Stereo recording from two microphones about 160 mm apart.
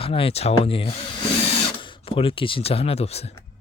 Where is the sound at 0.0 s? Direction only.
35° left (ahead or behind).